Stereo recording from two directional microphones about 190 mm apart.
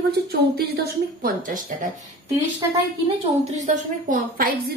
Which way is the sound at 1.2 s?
45° right (ahead or behind).